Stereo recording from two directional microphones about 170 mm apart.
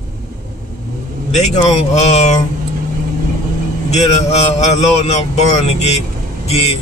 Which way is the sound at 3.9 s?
40° left (ahead or behind).